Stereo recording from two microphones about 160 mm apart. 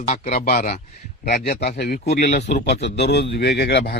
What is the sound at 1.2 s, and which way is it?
Speech, 75° left (ahead or behind).